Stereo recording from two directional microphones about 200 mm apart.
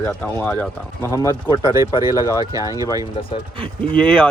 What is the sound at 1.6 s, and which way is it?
Speech, 15° right (ahead or behind).